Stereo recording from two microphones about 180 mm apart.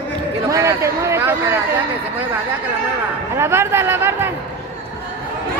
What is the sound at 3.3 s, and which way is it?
Speech, 15° right (ahead or behind).